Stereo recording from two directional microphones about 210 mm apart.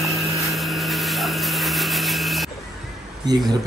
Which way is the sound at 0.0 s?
Centre (ahead or behind).